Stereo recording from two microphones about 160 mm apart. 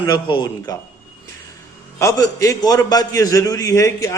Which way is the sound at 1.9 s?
20° left (ahead or behind).